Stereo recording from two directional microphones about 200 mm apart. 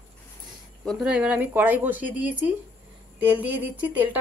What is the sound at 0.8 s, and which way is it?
Speech, 5° right (ahead or behind).